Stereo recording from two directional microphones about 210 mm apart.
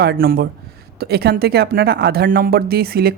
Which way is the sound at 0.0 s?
50° right (ahead or behind).